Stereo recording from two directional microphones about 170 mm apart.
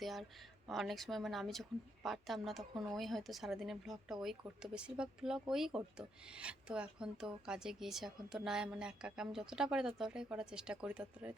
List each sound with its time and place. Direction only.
0.0 s a woman's voice: centre (ahead or behind)